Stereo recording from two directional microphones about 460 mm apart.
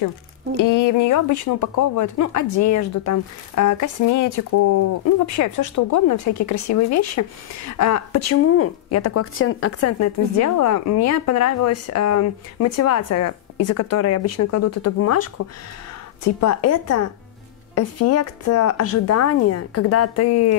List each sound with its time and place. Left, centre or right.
0.6 s speech: left